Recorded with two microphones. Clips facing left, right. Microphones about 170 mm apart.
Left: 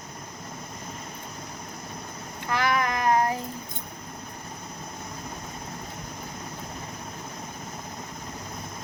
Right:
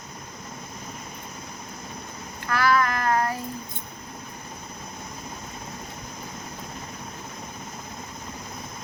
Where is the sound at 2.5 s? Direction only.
20° left (ahead or behind).